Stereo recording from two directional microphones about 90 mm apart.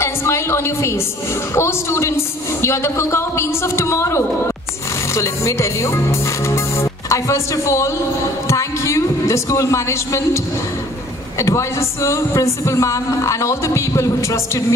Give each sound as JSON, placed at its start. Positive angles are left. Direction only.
{"t": 0.0, "sound": "a woman's voice", "side_deg": 30}